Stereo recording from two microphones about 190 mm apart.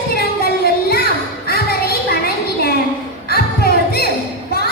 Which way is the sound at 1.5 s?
55° left (ahead or behind).